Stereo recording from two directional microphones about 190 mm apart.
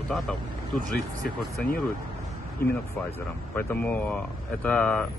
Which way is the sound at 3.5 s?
10° left (ahead or behind).